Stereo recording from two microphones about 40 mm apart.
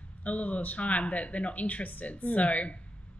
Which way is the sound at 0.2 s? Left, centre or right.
Left.